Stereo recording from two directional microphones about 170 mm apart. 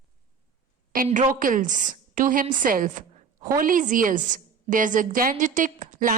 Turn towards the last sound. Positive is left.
turn(degrees=-50)  # may be behind; listen again after turning